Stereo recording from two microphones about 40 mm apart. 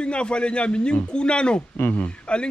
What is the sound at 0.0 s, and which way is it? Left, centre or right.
Speech, left.